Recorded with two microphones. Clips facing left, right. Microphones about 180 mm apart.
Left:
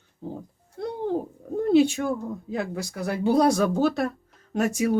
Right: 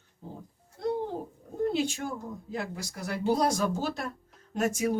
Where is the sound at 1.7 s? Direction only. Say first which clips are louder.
Left 11 dB; 65° left (ahead or behind).